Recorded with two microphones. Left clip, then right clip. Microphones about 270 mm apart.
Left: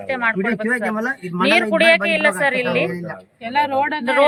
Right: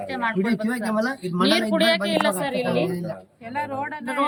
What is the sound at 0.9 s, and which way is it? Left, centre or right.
Speech, centre.